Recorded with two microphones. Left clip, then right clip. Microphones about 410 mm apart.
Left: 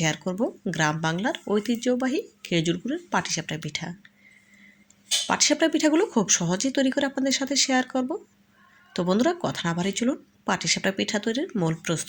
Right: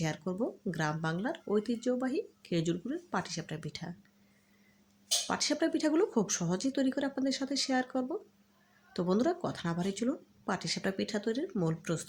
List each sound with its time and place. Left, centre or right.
0.0 s speech: left
5.3 s speech: left